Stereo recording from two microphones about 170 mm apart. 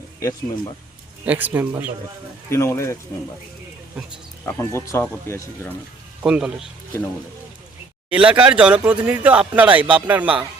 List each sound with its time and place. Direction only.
0.2 s speech: 20° left (ahead or behind)
1.2 s a man's voice: 10° right (ahead or behind)
2.5 s speech: 15° left (ahead or behind)
4.4 s speech: 15° left (ahead or behind)
6.2 s speech: 5° right (ahead or behind)
8.1 s a man's voice: 10° right (ahead or behind)